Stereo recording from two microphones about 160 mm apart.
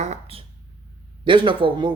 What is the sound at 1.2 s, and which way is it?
Speech, 30° right (ahead or behind).